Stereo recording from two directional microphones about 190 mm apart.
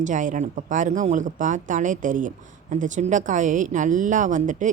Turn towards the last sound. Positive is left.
turn(degrees=-40)  # may be behind; listen again after turning